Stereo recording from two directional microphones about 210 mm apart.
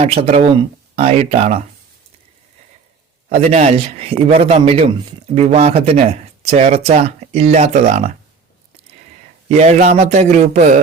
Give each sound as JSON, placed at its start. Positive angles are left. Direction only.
{"t": 0.0, "sound": "speech", "side_deg": -30}
{"t": 3.2, "sound": "speech", "side_deg": -30}
{"t": 9.5, "sound": "speech", "side_deg": -35}